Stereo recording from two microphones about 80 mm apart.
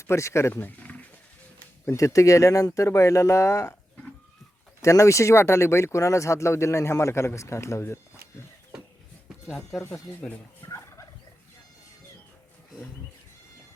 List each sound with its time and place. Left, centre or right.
0.0 s speech: left
0.6 s a sound: centre
2.0 s speech: left
4.8 s speech: left
9.5 s speech: centre
10.7 s turkey: left